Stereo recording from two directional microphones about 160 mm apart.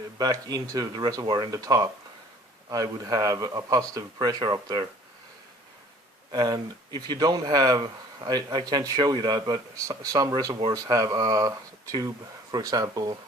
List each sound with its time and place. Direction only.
0.2 s speech: 25° right (ahead or behind)
6.3 s speech: 25° right (ahead or behind)